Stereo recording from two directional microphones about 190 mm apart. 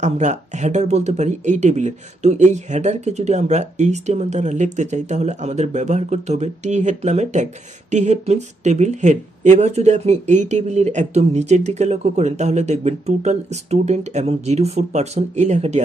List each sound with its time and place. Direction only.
0.0 s speech: 40° right (ahead or behind)